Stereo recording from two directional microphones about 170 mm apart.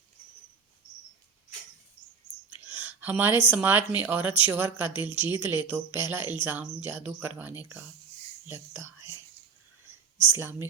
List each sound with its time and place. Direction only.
2.5 s a sound: 10° right (ahead or behind)
3.5 s speech: 10° right (ahead or behind)
5.0 s a woman's voice: 30° left (ahead or behind)
5.3 s speech: 10° right (ahead or behind)
10.3 s speech: 15° right (ahead or behind)